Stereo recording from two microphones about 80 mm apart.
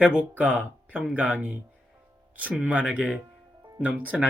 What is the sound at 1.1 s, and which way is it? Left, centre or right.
Speech, centre.